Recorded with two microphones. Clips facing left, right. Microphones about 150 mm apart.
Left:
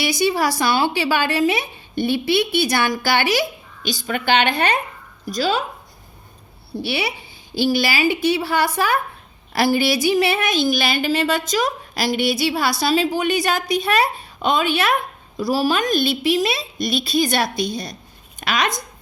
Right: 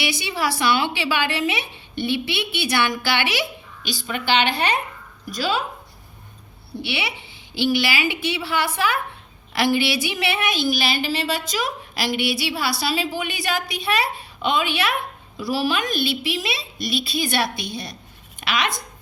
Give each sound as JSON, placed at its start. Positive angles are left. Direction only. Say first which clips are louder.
{"t": 0.0, "sound": "a woman's voice", "louder": "left 6 dB", "side_deg": 40}
{"t": 6.7, "sound": "a woman's voice", "louder": "left 4 dB", "side_deg": 40}